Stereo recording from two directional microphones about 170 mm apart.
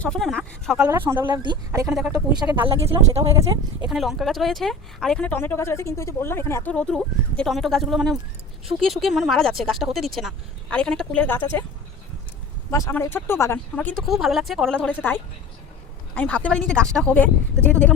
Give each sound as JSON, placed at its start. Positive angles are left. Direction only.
{"t": 0.0, "sound": "speech", "side_deg": 0}
{"t": 0.8, "sound": "speech", "side_deg": -10}
{"t": 1.2, "sound": "speech", "side_deg": -25}
{"t": 1.9, "sound": "speech", "side_deg": -5}
{"t": 2.4, "sound": "speech", "side_deg": -30}
{"t": 3.8, "sound": "speech", "side_deg": 0}
{"t": 12.7, "sound": "speech", "side_deg": 15}